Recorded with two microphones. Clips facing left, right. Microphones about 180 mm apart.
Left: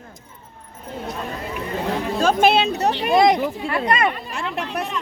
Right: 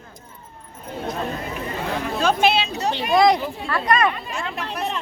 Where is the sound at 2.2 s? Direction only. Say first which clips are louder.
Left 3 dB; 50° left (ahead or behind).